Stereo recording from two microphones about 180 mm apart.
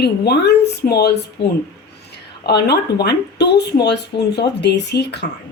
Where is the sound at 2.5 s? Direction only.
65° left (ahead or behind).